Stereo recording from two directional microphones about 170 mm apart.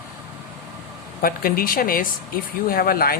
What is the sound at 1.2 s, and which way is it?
Speech, 60° left (ahead or behind).